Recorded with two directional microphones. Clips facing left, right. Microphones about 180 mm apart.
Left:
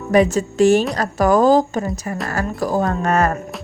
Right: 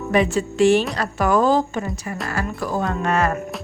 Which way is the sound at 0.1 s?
40° left (ahead or behind).